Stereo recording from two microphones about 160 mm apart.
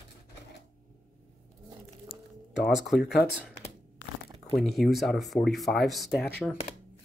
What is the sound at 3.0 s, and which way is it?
Speech, 90° left.